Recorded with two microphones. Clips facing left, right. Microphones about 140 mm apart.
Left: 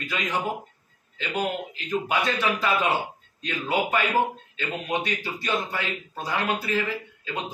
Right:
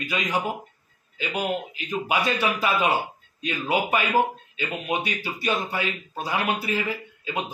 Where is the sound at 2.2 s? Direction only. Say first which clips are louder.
Right 1 dB; 10° right (ahead or behind).